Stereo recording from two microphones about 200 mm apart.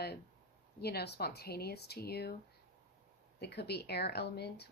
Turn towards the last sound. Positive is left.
turn(degrees=55)  # may be behind; listen again after turning